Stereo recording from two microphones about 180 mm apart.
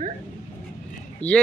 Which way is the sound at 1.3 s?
5° left (ahead or behind).